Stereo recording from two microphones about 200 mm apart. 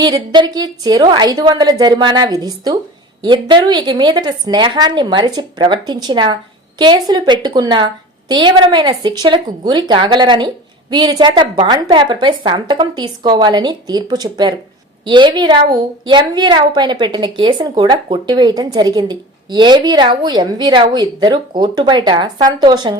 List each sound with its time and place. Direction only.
0.0 s a woman's voice: 20° right (ahead or behind)